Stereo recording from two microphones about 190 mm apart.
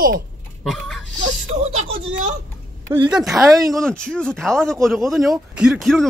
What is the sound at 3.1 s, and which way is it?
Speech, centre (ahead or behind).